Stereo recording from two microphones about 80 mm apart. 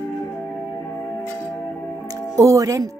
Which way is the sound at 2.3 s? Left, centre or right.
Right.